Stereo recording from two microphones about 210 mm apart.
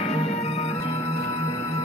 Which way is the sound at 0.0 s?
30° left (ahead or behind).